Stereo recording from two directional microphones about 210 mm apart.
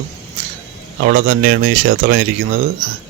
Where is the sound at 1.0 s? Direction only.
45° right (ahead or behind).